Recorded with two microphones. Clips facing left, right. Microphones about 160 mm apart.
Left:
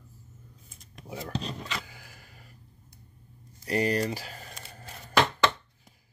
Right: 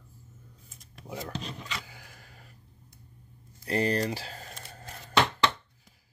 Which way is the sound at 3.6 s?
10° left (ahead or behind).